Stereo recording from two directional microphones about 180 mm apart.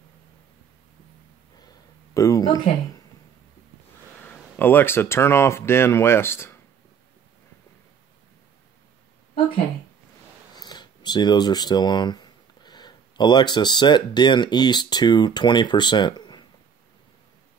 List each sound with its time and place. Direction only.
2.1 s speech: 20° left (ahead or behind)
4.2 s speech: 10° left (ahead or behind)
10.5 s speech: 25° left (ahead or behind)